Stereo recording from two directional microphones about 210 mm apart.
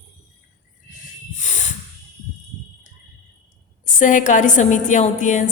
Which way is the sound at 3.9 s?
35° left (ahead or behind).